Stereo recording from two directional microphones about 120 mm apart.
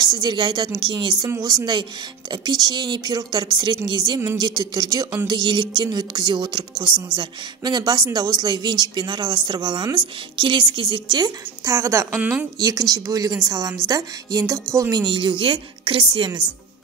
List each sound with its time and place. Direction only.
0.0 s speech: 35° right (ahead or behind)
12.2 s a woman's voice: 10° right (ahead or behind)
12.5 s speech: 30° right (ahead or behind)